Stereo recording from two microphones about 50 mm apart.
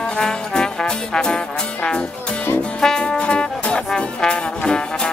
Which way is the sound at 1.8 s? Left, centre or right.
Centre.